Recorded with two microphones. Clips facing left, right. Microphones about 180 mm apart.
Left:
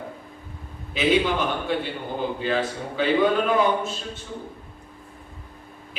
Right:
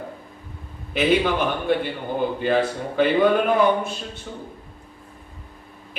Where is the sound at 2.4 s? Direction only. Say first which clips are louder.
Right 4 dB; 55° right (ahead or behind).